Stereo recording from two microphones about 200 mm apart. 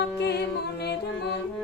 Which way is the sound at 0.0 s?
55° left (ahead or behind).